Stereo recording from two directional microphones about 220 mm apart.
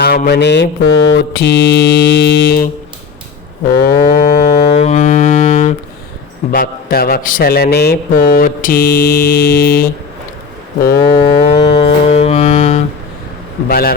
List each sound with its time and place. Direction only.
0.0 s a man's voice: 45° left (ahead or behind)
3.7 s cattle: 45° left (ahead or behind)
4.8 s music: 30° left (ahead or behind)
6.5 s a man's voice: 40° left (ahead or behind)
10.8 s a man's voice: 45° left (ahead or behind)
11.3 s music: 25° left (ahead or behind)
13.7 s a man's voice: 45° left (ahead or behind)